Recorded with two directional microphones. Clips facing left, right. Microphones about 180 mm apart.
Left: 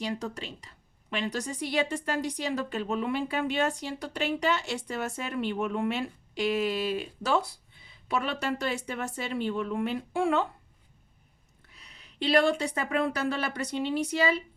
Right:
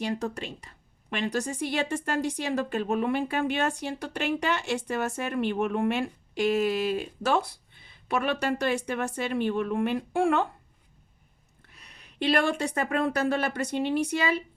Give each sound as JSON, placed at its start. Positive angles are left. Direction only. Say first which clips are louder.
{"t": 0.0, "sound": "a woman's voice", "louder": "right 3 dB", "side_deg": -50}
{"t": 11.7, "sound": "a woman's voice", "louder": "right 1 dB", "side_deg": -55}